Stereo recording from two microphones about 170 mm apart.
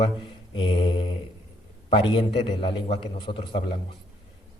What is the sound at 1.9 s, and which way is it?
A man's voice, 30° left (ahead or behind).